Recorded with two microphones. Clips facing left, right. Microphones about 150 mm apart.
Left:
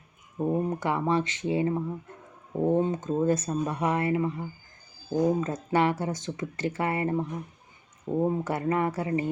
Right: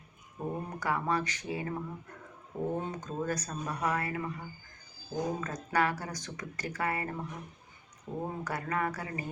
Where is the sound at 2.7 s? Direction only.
25° left (ahead or behind).